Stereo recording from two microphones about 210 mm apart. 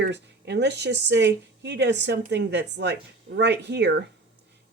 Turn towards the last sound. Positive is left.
turn(degrees=-55)  # may be behind; listen again after turning